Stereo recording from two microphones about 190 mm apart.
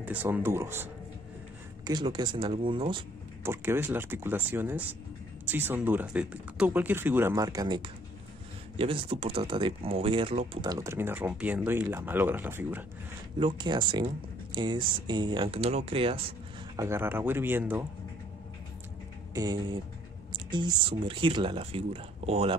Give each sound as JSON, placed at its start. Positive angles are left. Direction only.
{"t": 0.0, "sound": "speech", "side_deg": -10}
{"t": 1.9, "sound": "speech", "side_deg": -20}
{"t": 3.4, "sound": "speech", "side_deg": -10}
{"t": 13.4, "sound": "speech", "side_deg": -25}
{"t": 16.7, "sound": "speech", "side_deg": -15}
{"t": 19.3, "sound": "speech", "side_deg": -20}